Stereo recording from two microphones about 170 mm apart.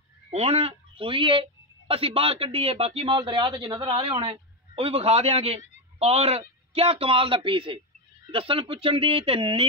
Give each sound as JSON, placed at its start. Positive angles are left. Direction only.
{"t": 0.3, "sound": "a woman's voice", "side_deg": -35}